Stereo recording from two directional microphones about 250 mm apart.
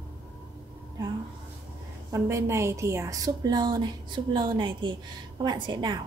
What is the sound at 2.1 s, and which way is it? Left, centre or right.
A woman's voice, centre.